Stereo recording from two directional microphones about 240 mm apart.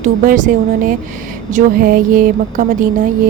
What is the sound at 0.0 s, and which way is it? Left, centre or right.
Speech, right.